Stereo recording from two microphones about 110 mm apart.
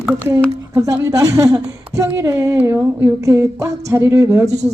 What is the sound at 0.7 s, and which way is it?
A woman's voice, 30° right (ahead or behind).